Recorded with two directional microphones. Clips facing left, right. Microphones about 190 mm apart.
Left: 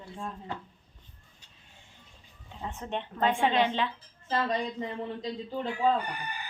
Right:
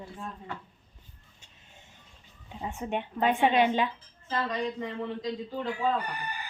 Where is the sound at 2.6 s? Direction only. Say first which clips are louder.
Right 3 dB; 15° right (ahead or behind).